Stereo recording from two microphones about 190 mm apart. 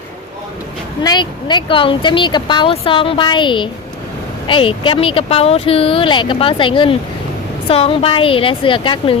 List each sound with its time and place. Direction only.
1.0 s speech: 25° left (ahead or behind)